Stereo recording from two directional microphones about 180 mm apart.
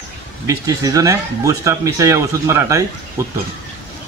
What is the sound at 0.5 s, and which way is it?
Speech, 20° right (ahead or behind).